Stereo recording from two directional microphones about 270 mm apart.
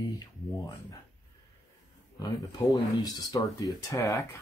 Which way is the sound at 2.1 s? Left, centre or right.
Centre.